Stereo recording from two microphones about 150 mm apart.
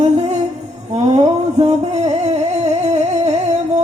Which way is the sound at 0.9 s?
45° right (ahead or behind).